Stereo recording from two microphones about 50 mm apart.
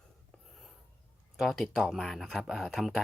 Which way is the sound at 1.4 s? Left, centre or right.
Centre.